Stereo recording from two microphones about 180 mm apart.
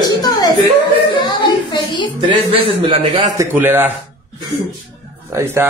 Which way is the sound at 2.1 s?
30° right (ahead or behind).